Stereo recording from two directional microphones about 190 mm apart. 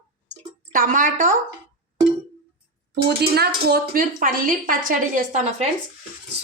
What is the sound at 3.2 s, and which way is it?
A woman's voice, 55° right (ahead or behind).